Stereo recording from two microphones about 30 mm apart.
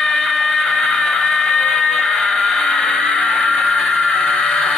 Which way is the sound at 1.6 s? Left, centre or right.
Left.